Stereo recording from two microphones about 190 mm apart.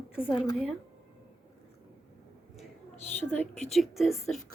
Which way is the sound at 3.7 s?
Centre (ahead or behind).